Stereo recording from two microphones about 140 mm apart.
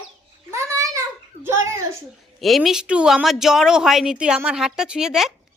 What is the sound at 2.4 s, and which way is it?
Speech, centre (ahead or behind).